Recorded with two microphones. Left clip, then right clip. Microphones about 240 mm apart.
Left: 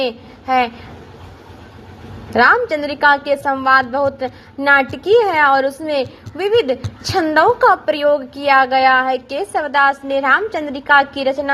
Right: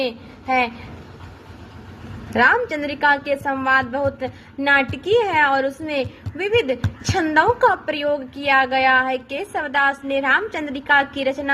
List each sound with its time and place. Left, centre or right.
0.0 s speech: centre
2.3 s a woman's voice: centre